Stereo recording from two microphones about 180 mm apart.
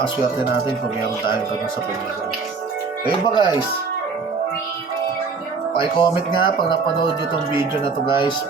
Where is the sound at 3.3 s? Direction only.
25° left (ahead or behind).